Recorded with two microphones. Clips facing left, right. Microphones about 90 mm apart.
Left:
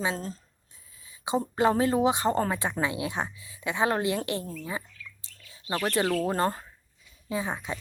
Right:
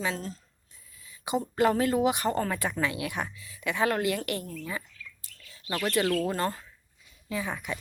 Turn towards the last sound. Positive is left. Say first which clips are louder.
# left 2 dB
turn(degrees=30)  # may be behind; listen again after turning